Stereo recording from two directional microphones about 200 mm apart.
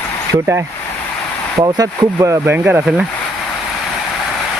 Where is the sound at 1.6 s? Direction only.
15° right (ahead or behind).